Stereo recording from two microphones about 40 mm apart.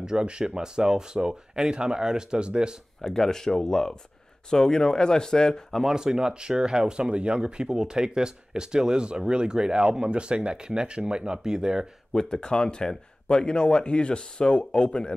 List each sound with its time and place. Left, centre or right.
0.0 s speech: right
3.0 s speech: centre
5.9 s speech: centre
12.1 s speech: centre